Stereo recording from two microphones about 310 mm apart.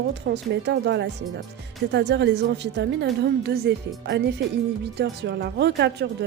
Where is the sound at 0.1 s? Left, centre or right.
Right.